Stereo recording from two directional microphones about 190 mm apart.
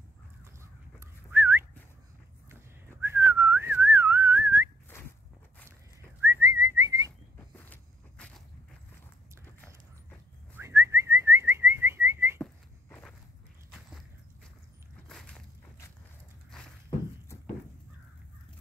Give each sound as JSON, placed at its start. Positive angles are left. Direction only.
{"t": 0.6, "sound": "whistling", "side_deg": -15}
{"t": 3.0, "sound": "whistling", "side_deg": -15}
{"t": 6.2, "sound": "whistling", "side_deg": -15}
{"t": 7.5, "sound": "vehicle", "side_deg": 10}
{"t": 10.6, "sound": "whistling", "side_deg": -15}
{"t": 13.7, "sound": "walk", "side_deg": 0}
{"t": 15.0, "sound": "walk", "side_deg": 0}